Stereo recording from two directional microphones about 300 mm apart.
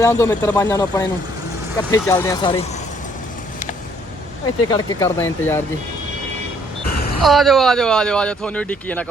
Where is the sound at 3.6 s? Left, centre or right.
Left.